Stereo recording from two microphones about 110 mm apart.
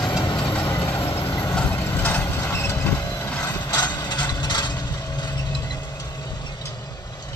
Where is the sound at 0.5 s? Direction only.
15° left (ahead or behind).